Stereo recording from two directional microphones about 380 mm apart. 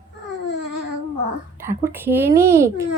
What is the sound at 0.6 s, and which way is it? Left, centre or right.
Babbling, right.